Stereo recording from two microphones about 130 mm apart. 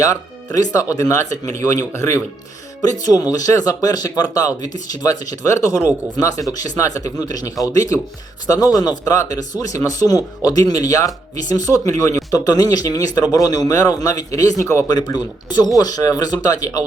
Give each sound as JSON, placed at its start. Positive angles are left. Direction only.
{"t": 0.5, "sound": "speech", "side_deg": 25}